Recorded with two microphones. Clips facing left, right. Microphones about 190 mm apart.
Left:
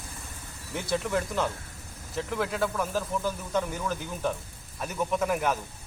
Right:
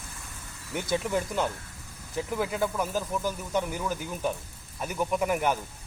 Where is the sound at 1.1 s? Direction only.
10° right (ahead or behind).